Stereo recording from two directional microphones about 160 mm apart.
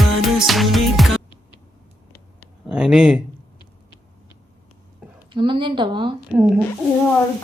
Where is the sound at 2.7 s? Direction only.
5° right (ahead or behind).